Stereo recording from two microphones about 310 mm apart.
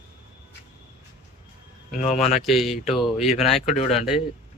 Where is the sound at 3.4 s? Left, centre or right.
Left.